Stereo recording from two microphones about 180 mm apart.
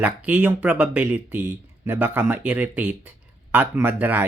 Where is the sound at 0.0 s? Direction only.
10° right (ahead or behind).